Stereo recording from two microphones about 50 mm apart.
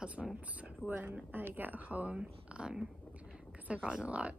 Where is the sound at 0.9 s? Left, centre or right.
Right.